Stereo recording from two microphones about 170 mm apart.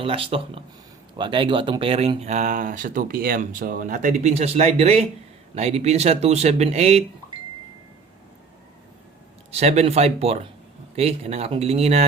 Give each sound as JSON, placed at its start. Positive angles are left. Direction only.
{"t": 0.0, "sound": "speech", "side_deg": -35}
{"t": 9.5, "sound": "speech", "side_deg": -40}